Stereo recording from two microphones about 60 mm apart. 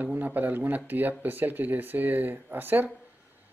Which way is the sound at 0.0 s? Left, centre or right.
Right.